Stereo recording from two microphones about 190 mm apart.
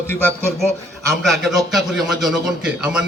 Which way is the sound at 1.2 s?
Centre (ahead or behind).